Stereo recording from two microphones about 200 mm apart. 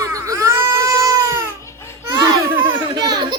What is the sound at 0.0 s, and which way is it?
Baby cry, 15° right (ahead or behind).